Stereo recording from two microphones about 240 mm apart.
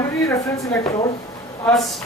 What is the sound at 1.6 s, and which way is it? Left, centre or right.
Speech, centre.